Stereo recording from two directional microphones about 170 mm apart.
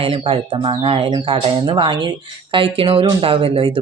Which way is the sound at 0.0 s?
30° right (ahead or behind).